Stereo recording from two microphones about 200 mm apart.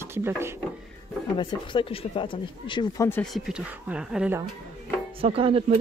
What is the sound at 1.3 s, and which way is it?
Speech, 25° left (ahead or behind).